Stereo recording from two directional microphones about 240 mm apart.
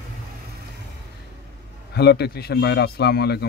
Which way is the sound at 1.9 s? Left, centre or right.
Left.